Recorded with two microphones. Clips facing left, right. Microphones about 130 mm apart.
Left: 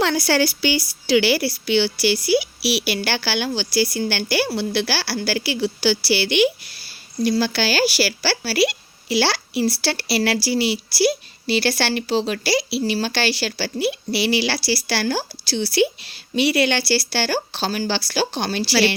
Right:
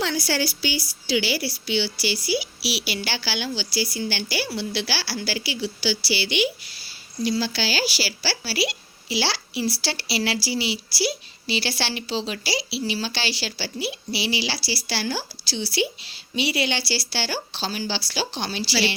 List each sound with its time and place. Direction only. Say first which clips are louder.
0.0 s a woman's voice: left 6 dB; 65° left (ahead or behind)